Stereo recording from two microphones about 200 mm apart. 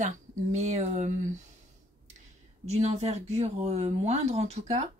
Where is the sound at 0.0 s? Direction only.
35° right (ahead or behind).